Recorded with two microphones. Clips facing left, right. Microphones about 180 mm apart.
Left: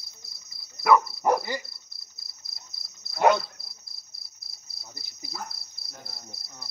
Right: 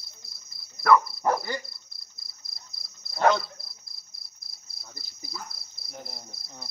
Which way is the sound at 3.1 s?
10° left (ahead or behind).